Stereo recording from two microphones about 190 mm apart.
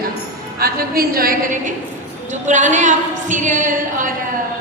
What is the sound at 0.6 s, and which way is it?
A woman's voice, 50° right (ahead or behind).